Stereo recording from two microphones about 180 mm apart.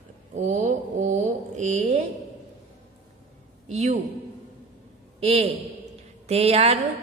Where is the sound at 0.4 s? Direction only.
40° right (ahead or behind).